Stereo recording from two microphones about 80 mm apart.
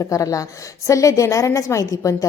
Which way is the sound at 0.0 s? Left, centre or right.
Left.